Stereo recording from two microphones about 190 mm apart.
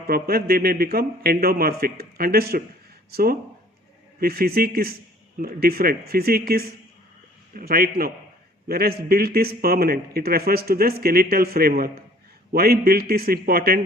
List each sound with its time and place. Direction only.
0.1 s a man's voice: 55° right (ahead or behind)